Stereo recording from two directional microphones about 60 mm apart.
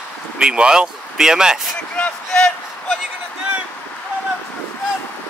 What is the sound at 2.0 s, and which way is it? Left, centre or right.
Speech, centre.